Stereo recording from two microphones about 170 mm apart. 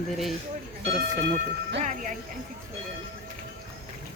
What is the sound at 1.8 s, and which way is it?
Speech, 45° right (ahead or behind).